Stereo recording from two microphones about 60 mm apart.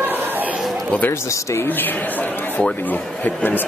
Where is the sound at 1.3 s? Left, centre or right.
Left.